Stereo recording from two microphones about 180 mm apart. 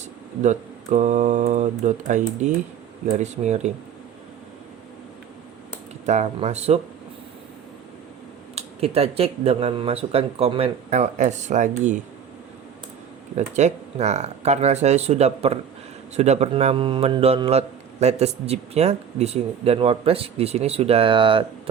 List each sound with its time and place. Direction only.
0.4 s a man's voice: 40° right (ahead or behind)
6.1 s a man's voice: 40° right (ahead or behind)
8.5 s a man's voice: 35° right (ahead or behind)
13.3 s a man's voice: 40° right (ahead or behind)